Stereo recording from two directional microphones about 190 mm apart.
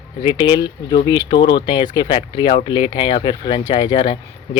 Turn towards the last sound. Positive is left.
turn(degrees=25)  # may be behind; listen again after turning